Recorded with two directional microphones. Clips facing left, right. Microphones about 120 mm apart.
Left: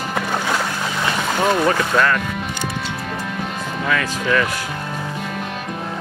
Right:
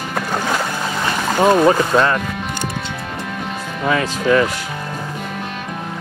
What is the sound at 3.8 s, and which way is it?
Speech, 25° right (ahead or behind).